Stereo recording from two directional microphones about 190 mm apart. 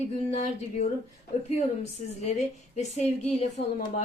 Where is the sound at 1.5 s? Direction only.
35° left (ahead or behind).